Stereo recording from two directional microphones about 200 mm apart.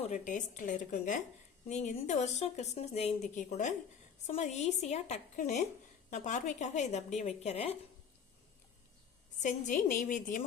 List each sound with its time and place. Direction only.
0.0 s a woman's voice: 35° left (ahead or behind)
9.4 s a woman's voice: 40° left (ahead or behind)